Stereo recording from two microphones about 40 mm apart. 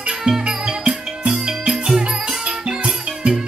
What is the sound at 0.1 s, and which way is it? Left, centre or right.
Music, centre.